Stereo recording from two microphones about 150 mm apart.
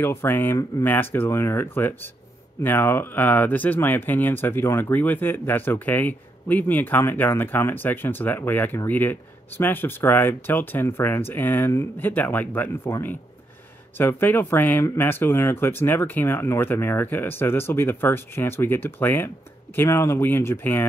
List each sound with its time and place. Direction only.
0.0 s speech: 15° left (ahead or behind)
13.9 s speech: 15° left (ahead or behind)